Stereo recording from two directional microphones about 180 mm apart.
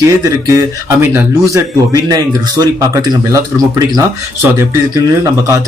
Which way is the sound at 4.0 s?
15° right (ahead or behind).